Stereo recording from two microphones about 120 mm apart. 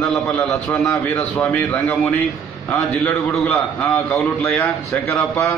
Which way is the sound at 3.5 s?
25° left (ahead or behind).